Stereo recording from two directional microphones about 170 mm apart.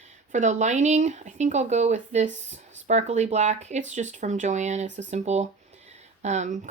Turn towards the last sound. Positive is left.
turn(degrees=-45)  # may be behind; listen again after turning